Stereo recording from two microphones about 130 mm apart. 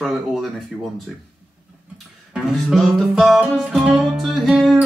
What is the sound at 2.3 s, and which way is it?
Music, centre (ahead or behind).